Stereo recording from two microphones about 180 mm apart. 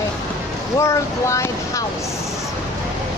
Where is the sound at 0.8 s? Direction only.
15° left (ahead or behind).